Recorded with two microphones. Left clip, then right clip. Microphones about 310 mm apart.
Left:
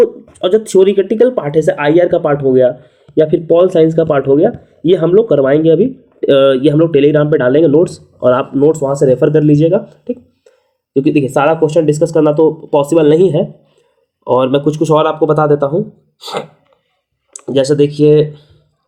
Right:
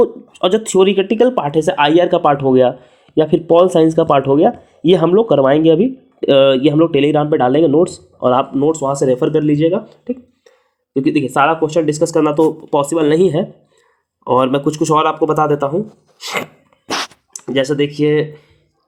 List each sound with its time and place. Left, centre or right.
0.0 s speech: right
17.4 s speech: centre